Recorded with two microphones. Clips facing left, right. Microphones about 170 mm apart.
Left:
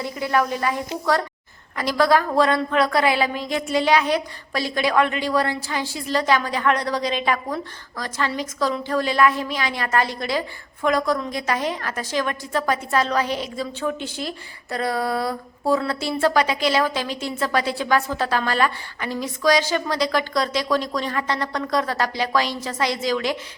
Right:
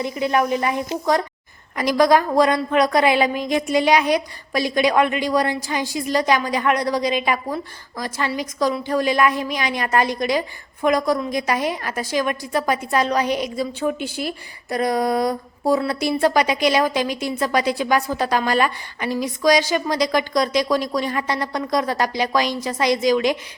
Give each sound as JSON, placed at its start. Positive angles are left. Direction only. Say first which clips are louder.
{"t": 0.0, "sound": "a woman's voice", "louder": "right 2 dB", "side_deg": -20}